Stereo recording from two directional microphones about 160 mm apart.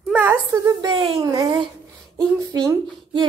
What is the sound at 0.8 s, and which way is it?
Speech, 35° right (ahead or behind).